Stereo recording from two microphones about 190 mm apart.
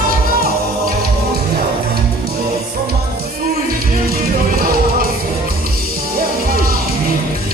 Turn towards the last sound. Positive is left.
turn(degrees=-50)  # may be behind; listen again after turning